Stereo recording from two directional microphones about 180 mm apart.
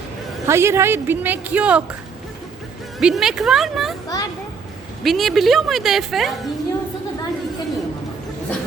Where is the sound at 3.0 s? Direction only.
5° right (ahead or behind).